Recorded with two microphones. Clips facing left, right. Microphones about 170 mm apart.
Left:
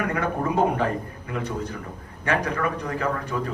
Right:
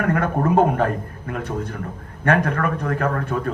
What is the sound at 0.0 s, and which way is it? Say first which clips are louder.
A man's voice: right 5 dB; 50° right (ahead or behind).